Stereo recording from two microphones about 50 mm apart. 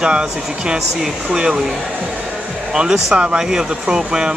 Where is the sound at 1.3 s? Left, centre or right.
Centre.